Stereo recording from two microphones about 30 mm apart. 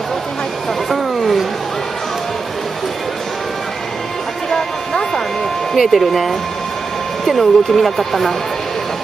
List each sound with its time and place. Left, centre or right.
0.8 s a sound: centre
4.5 s music: centre
5.8 s speech: centre